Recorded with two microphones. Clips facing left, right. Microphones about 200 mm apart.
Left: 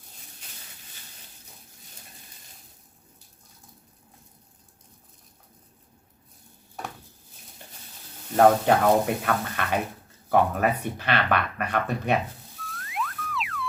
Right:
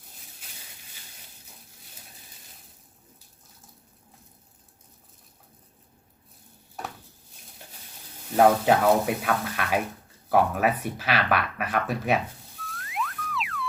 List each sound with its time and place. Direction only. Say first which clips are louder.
8.3 s speech: left 1 dB; 5° right (ahead or behind)
12.6 s music: even; centre (ahead or behind)